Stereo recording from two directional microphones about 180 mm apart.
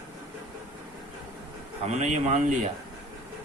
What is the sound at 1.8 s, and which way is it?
Speech, 40° right (ahead or behind).